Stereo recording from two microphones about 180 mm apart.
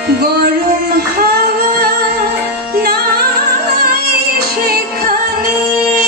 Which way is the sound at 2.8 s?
60° right (ahead or behind).